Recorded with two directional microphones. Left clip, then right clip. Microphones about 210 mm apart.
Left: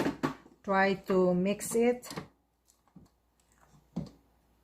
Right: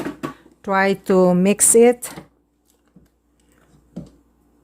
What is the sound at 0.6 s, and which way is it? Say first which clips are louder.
Speech: right 10 dB; 60° right (ahead or behind).